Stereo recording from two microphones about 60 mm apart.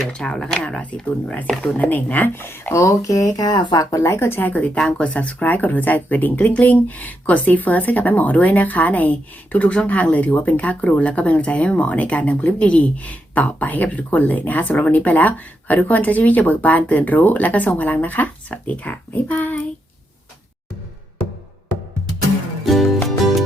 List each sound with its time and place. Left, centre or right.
0.0 s speech: centre
1.8 s a woman's voice: left
2.7 s speech: left
4.0 s a woman's voice: left
4.9 s speech: centre
22.6 s music: centre